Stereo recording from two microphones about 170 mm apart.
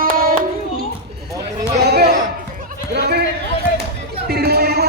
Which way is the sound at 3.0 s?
70° right (ahead or behind).